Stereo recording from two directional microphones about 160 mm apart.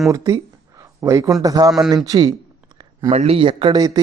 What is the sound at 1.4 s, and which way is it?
Speech, 25° right (ahead or behind).